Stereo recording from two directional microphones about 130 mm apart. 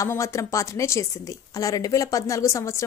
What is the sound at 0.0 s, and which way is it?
A woman's voice, 25° left (ahead or behind).